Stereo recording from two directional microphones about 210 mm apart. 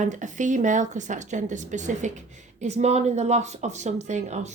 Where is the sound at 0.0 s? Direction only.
35° right (ahead or behind).